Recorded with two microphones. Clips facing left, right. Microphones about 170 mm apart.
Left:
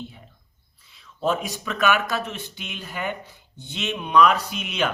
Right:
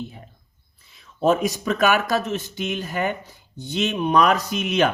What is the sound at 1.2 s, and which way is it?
Speech, 45° right (ahead or behind).